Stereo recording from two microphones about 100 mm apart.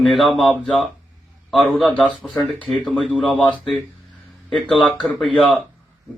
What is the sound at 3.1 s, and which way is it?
Speech, 10° left (ahead or behind).